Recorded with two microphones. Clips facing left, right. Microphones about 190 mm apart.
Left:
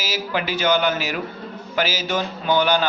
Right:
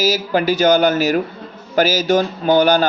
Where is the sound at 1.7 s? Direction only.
45° right (ahead or behind).